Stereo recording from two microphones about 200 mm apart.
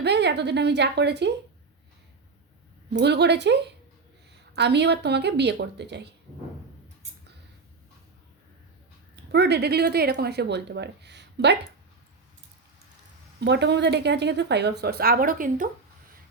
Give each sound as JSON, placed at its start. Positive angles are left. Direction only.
{"t": 0.0, "sound": "a woman's voice", "side_deg": -60}
{"t": 2.9, "sound": "speech", "side_deg": -55}
{"t": 9.1, "sound": "speech", "side_deg": -60}
{"t": 13.4, "sound": "speech", "side_deg": -60}